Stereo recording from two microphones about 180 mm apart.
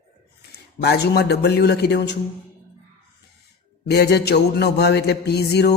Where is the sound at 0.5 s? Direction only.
65° left (ahead or behind).